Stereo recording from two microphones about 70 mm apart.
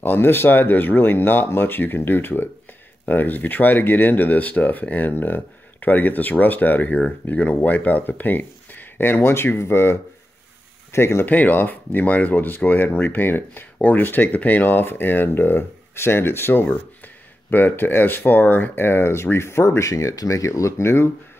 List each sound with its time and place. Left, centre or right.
0.0 s speech: left
11.2 s speech: left